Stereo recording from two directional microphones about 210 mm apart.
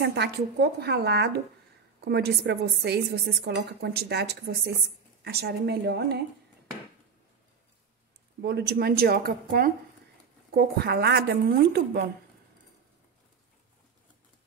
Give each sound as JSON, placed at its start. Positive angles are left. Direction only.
{"t": 0.0, "sound": "speech", "side_deg": -55}
{"t": 8.4, "sound": "speech", "side_deg": -50}